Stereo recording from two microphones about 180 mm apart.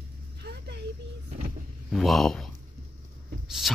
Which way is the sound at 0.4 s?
70° right (ahead or behind).